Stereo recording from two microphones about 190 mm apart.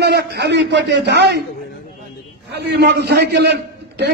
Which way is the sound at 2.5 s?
60° right (ahead or behind).